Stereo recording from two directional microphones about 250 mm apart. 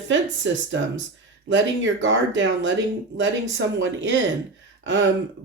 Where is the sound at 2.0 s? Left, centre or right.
Right.